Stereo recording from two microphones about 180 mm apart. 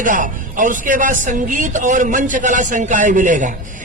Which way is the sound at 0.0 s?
45° right (ahead or behind).